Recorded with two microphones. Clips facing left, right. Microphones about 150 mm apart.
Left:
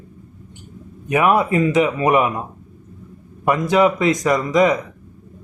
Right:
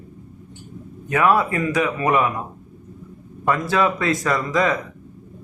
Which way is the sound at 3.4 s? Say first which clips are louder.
Left 4 dB; 15° left (ahead or behind).